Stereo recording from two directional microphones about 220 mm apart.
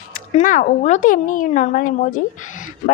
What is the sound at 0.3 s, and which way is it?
Speech, 35° left (ahead or behind).